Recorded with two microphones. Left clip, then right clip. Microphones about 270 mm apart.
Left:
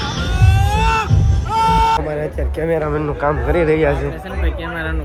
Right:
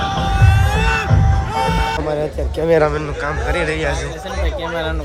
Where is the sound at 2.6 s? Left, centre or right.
Centre.